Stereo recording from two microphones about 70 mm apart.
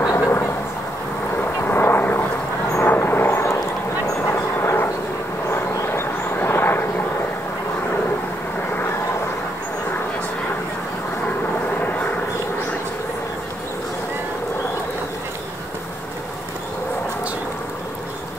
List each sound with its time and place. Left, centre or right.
0.1 s vehicle: left
4.2 s a sound: left
5.5 s vehicle: left